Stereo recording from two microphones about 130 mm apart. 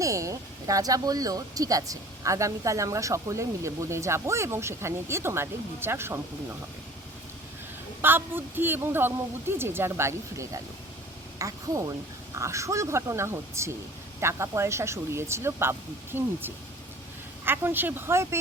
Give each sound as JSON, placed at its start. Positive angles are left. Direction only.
{"t": 0.0, "sound": "speech", "side_deg": -25}
{"t": 8.0, "sound": "speech", "side_deg": -15}
{"t": 17.4, "sound": "speech", "side_deg": -15}